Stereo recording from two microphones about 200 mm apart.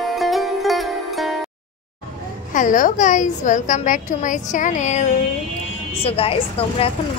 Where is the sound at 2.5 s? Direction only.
40° left (ahead or behind).